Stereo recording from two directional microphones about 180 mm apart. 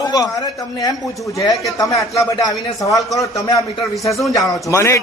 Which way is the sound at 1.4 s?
20° left (ahead or behind).